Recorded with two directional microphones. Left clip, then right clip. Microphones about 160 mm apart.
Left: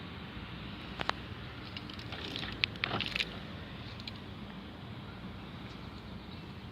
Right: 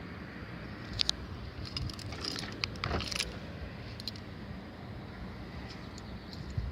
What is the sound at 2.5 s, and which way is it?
Vehicle, 30° right (ahead or behind).